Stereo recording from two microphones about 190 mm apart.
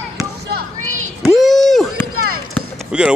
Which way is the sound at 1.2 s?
Centre (ahead or behind).